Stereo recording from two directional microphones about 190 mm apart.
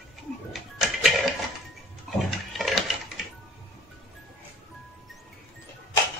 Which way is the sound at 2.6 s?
Centre (ahead or behind).